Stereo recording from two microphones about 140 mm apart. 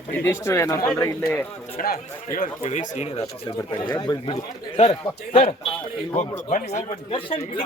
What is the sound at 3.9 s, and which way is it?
Speech, 35° left (ahead or behind).